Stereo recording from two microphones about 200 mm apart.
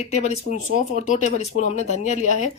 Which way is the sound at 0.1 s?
35° left (ahead or behind).